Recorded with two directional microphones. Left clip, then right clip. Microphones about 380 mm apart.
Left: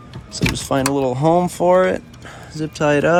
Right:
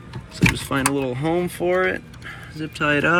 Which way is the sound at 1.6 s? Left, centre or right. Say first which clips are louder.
Left 7 dB; left.